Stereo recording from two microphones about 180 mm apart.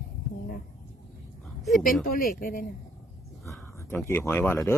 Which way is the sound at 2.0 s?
55° left (ahead or behind).